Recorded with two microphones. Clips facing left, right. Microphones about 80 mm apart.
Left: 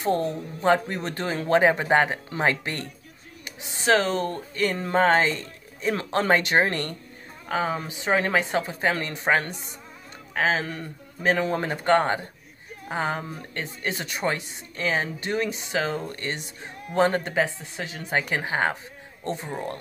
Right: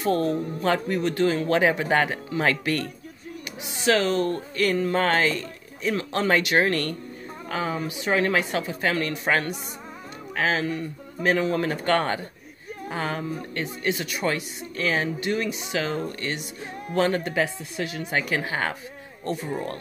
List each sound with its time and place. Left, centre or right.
0.6 s speech: left
3.6 s speech: left
5.8 s a woman's voice: left
11.7 s a woman's voice: left
13.8 s a woman's voice: left